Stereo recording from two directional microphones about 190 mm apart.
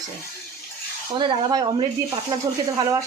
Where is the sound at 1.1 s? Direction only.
25° right (ahead or behind).